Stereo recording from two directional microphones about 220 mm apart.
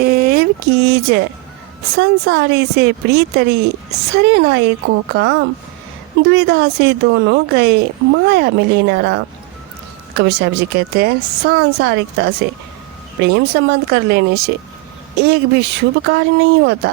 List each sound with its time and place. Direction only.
0.0 s a woman's voice: 45° right (ahead or behind)